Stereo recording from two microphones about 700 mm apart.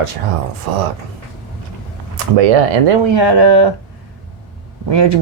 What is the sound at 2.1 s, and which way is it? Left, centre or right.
Speech, right.